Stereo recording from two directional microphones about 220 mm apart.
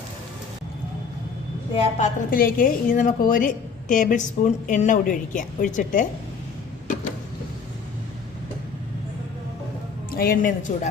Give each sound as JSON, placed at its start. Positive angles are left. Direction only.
{"t": 1.7, "sound": "a woman's voice", "side_deg": 35}
{"t": 10.1, "sound": "speech", "side_deg": 40}